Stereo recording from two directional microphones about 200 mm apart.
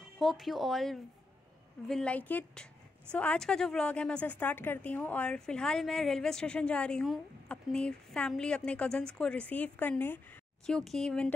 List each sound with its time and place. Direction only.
0.2 s a woman's voice: centre (ahead or behind)